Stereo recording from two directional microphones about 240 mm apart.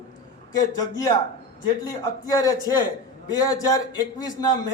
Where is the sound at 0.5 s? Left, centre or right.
Centre.